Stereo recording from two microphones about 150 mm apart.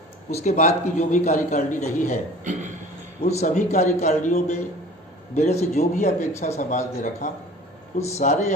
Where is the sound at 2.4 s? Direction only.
55° right (ahead or behind).